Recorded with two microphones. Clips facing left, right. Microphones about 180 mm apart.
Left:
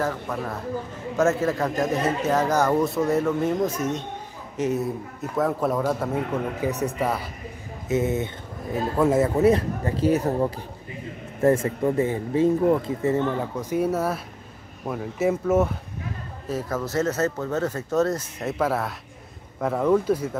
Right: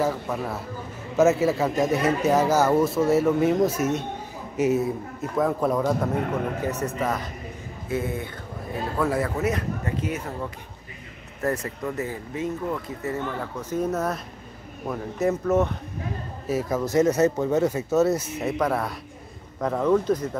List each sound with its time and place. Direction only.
0.0 s a man's voice: 10° right (ahead or behind)
6.6 s speech: 10° left (ahead or behind)
7.9 s speech: 20° left (ahead or behind)
13.2 s speech: 15° left (ahead or behind)
16.4 s a man's voice: 10° right (ahead or behind); by 20.2 s 5° left (ahead or behind)